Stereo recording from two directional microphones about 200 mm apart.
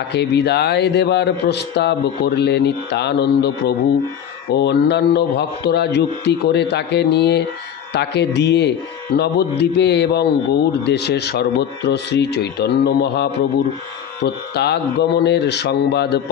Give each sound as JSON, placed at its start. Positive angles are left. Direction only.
{"t": 0.1, "sound": "speech", "side_deg": 55}